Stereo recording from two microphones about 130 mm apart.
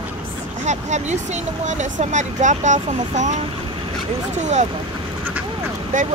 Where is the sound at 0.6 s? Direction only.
60° right (ahead or behind).